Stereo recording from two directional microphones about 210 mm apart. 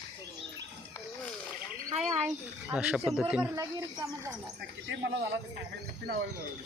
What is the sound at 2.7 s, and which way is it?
Speech, 5° right (ahead or behind).